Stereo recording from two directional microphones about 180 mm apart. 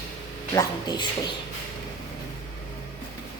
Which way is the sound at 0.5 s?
20° left (ahead or behind).